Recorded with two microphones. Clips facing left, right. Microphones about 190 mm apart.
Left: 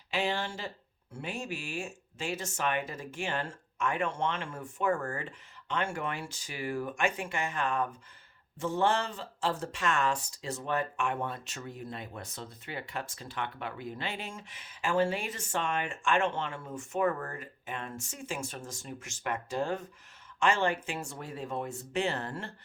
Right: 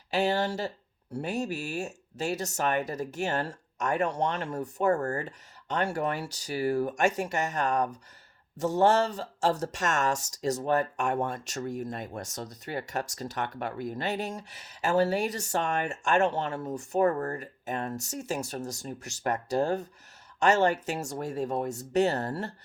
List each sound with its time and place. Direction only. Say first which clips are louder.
0.1 s speech: right 6 dB; 40° right (ahead or behind)